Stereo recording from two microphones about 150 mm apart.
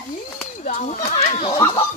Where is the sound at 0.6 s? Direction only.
60° left (ahead or behind).